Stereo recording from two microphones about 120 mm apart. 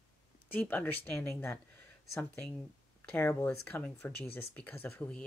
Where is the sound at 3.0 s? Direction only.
15° left (ahead or behind).